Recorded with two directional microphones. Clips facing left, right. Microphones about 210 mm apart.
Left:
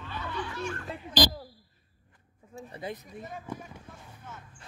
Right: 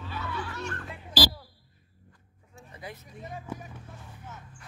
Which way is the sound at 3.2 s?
15° right (ahead or behind).